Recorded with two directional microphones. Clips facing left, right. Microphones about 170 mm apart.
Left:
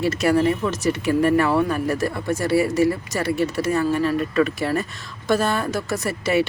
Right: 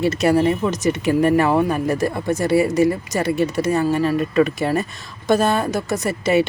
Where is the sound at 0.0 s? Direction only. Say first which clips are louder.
Right 2 dB; 20° right (ahead or behind).